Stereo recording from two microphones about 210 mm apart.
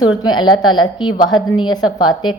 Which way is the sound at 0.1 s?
20° left (ahead or behind).